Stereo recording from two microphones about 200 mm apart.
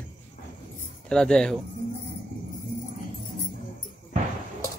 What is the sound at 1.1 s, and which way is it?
Speech, 5° left (ahead or behind).